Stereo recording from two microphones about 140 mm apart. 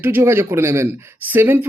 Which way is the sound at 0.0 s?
15° right (ahead or behind).